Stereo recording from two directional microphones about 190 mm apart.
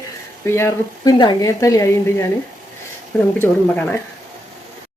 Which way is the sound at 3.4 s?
10° left (ahead or behind).